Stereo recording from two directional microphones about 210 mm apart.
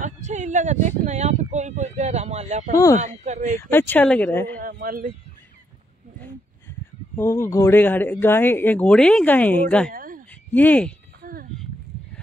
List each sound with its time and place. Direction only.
0.0 s a sound: 35° right (ahead or behind)
0.8 s speech: 35° right (ahead or behind)
2.7 s speech: 15° left (ahead or behind)
3.3 s speech: 35° right (ahead or behind)
3.7 s speech: 10° left (ahead or behind)
4.7 s a man's voice: 45° right (ahead or behind)
7.2 s speech: 10° left (ahead or behind)
9.8 s a sound: 40° right (ahead or behind)
10.5 s speech: 10° left (ahead or behind)
11.2 s a sound: 40° right (ahead or behind)